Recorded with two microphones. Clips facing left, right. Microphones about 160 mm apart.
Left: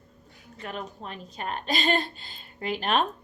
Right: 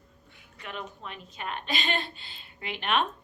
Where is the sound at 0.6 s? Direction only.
40° left (ahead or behind).